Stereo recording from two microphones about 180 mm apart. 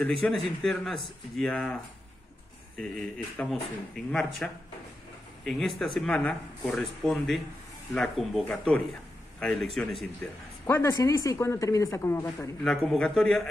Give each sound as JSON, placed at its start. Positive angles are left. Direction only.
{"t": 0.0, "sound": "speech", "side_deg": 5}
{"t": 3.3, "sound": "speech", "side_deg": 5}
{"t": 10.7, "sound": "speech", "side_deg": 15}
{"t": 12.6, "sound": "speech", "side_deg": 0}